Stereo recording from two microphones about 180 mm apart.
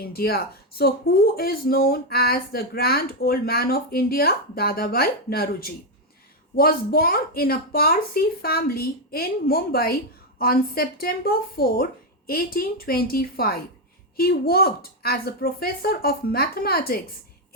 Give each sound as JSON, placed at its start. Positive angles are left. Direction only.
{"t": 0.0, "sound": "speech", "side_deg": 55}